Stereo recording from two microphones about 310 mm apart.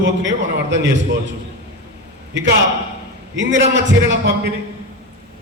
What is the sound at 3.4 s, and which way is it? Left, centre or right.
Speech, right.